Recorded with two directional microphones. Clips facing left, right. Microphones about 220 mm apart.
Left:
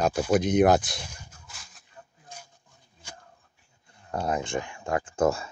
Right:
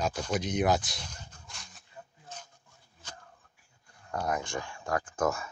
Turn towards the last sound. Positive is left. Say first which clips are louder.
# left 5 dB
turn(degrees=30)  # may be behind; listen again after turning